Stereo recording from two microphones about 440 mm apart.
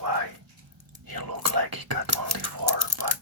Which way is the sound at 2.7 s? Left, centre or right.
Right.